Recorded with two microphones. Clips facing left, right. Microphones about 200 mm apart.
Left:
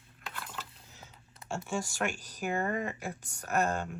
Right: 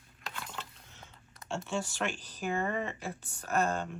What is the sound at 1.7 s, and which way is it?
Speech, 10° left (ahead or behind).